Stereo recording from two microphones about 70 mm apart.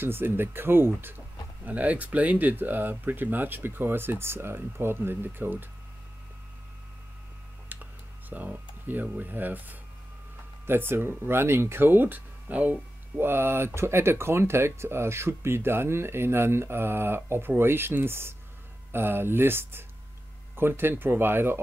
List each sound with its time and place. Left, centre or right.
0.0 s speech: right
7.7 s computer keyboard: right
9.2 s speech: right
13.2 s speech: right